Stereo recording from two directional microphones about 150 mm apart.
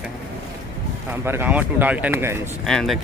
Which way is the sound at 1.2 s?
15° right (ahead or behind).